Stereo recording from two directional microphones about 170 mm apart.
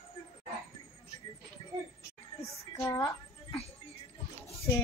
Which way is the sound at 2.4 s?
20° left (ahead or behind).